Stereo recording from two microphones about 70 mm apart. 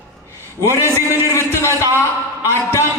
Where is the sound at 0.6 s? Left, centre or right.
Left.